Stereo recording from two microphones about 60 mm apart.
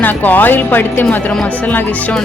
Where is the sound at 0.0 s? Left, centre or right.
Left.